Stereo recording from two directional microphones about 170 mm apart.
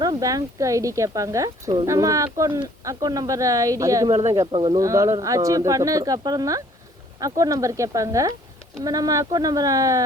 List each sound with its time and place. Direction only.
0.0 s speech: 20° right (ahead or behind)
4.5 s speech: 30° right (ahead or behind)
4.8 s speech: 20° right (ahead or behind)